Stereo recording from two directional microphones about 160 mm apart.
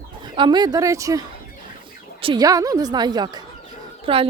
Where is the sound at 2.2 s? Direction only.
35° right (ahead or behind).